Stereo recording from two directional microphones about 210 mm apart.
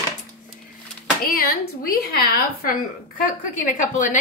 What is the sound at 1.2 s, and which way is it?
A woman's voice, 45° left (ahead or behind).